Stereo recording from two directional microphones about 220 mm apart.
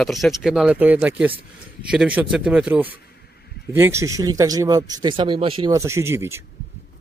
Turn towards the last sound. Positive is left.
turn(degrees=-10)  # may be behind; listen again after turning